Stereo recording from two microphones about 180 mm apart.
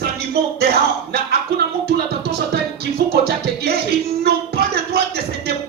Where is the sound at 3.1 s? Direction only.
60° right (ahead or behind).